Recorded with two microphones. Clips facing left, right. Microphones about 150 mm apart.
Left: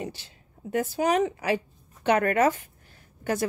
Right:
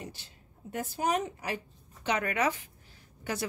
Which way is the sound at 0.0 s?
90° left.